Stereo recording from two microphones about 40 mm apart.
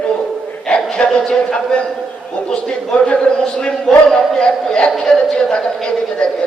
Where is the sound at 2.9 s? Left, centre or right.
Centre.